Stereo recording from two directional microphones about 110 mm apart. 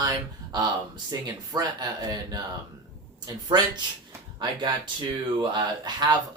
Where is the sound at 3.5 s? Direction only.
45° right (ahead or behind).